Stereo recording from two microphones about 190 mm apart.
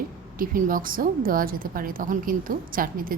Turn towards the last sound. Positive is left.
turn(degrees=-50)  # may be behind; listen again after turning